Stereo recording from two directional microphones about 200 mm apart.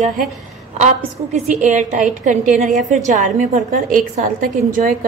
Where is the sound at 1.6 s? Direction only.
40° right (ahead or behind).